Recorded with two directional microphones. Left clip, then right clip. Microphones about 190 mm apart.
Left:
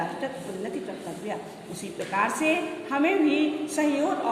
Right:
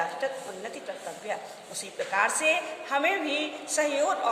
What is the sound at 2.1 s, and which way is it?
A woman's voice, 25° right (ahead or behind).